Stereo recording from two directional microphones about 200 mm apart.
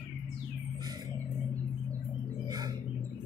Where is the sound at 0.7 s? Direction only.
20° right (ahead or behind).